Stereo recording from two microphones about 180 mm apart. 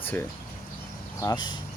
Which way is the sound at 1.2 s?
20° left (ahead or behind).